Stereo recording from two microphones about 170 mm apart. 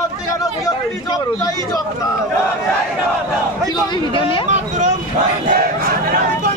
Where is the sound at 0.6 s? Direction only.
20° left (ahead or behind).